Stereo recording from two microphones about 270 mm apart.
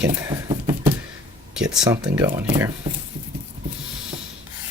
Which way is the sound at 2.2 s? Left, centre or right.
Centre.